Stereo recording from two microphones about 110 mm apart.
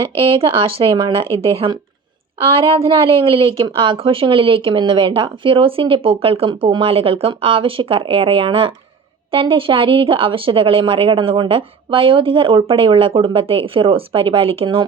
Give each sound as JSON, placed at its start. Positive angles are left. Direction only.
{"t": 0.2, "sound": "speech", "side_deg": -55}